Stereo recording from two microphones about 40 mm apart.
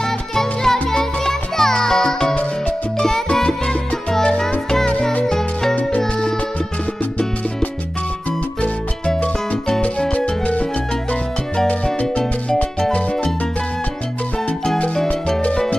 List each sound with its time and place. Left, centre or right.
0.0 s music: centre
5.2 s music: centre
9.8 s music: left